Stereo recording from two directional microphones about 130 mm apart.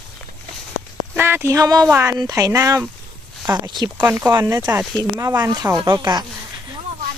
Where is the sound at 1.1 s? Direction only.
15° right (ahead or behind).